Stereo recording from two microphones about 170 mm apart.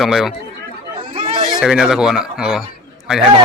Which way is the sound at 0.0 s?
Centre (ahead or behind).